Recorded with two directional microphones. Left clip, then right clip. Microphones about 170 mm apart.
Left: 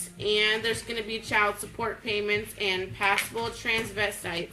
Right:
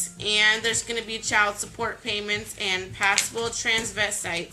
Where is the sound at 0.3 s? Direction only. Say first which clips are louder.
Right 5 dB; 25° right (ahead or behind).